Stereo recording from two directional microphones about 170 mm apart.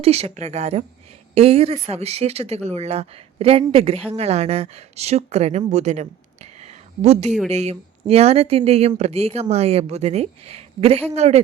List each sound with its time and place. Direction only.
0.0 s speech: 40° right (ahead or behind)